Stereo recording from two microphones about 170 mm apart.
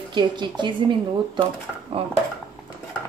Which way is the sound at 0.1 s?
25° right (ahead or behind).